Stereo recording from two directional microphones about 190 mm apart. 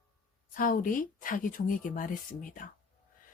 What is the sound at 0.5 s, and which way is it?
Speech, 45° left (ahead or behind).